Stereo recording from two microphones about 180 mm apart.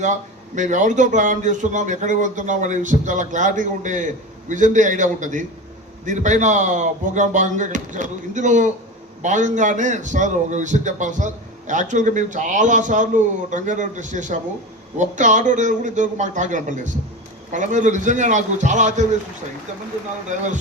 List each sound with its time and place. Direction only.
0.0 s a man's voice: 45° right (ahead or behind)